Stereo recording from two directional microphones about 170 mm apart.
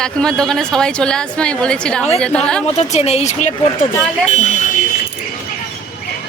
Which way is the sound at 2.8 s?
40° left (ahead or behind).